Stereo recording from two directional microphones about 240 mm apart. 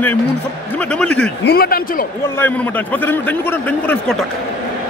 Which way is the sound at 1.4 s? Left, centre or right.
Left.